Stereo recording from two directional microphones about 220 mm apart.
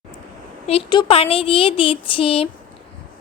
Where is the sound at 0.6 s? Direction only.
25° left (ahead or behind).